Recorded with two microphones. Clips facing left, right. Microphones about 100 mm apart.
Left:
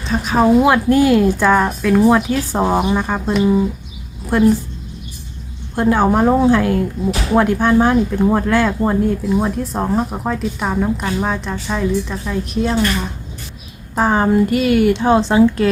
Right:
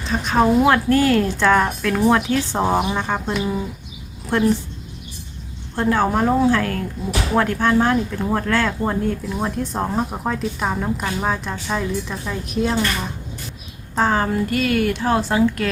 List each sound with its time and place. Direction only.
0.0 s a woman's voice: centre (ahead or behind)
5.7 s a woman's voice: 15° left (ahead or behind)
13.9 s speech: 10° left (ahead or behind)
14.2 s speech: 20° left (ahead or behind)